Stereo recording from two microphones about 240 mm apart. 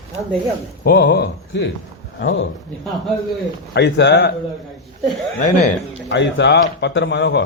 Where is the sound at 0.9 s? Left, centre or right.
Left.